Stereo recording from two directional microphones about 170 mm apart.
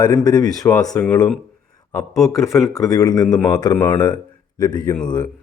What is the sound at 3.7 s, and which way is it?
Speech, 10° left (ahead or behind).